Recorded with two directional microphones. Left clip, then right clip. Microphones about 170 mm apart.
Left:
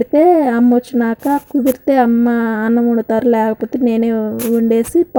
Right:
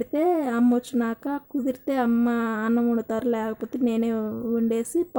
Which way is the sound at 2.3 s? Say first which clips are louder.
Left 9 dB; 20° left (ahead or behind).